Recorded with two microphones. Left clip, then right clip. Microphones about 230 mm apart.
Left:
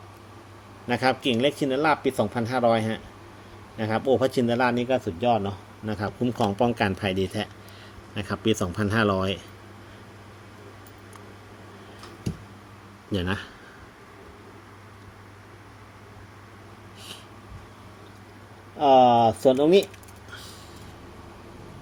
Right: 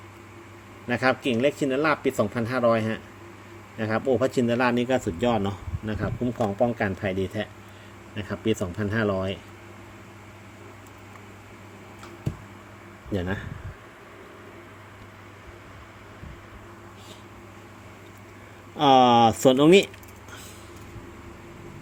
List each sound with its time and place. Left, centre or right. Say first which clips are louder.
0.9 s speech: even; centre
4.4 s a man's voice: even; centre
5.8 s speech: left 1 dB; centre
6.3 s speech: even; centre
13.1 s speech: left 1 dB; centre
18.8 s speech: even; right